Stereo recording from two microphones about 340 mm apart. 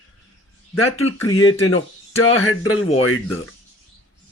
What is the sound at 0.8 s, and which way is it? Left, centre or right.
Speech, left.